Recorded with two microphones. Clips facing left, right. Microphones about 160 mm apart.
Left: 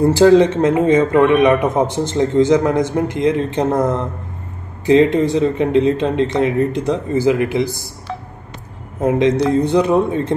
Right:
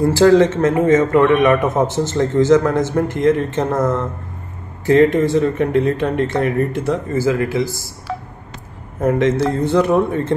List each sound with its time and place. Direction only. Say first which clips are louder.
0.0 s a man's voice: left 1 dB; 20° left (ahead or behind)
9.0 s a man's voice: left 1 dB; 20° left (ahead or behind)